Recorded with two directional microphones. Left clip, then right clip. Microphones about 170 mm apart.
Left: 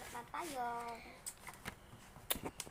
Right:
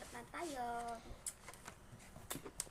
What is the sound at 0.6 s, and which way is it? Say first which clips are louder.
Speech: left 1 dB; 15° right (ahead or behind).